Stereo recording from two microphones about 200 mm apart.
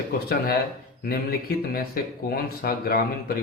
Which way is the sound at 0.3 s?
50° left (ahead or behind).